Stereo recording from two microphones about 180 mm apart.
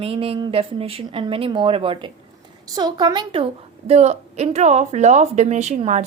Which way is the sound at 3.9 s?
35° right (ahead or behind).